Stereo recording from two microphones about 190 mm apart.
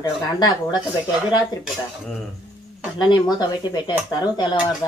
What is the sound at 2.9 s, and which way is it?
Speech, 25° left (ahead or behind).